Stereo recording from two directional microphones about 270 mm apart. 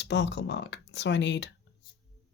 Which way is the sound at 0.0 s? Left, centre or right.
Left.